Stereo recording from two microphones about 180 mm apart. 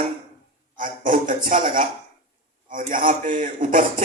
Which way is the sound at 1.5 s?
45° right (ahead or behind).